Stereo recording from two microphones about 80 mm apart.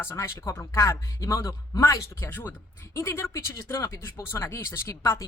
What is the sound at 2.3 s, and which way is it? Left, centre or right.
Speech, left.